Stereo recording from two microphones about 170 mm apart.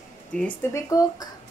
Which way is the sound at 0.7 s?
20° left (ahead or behind).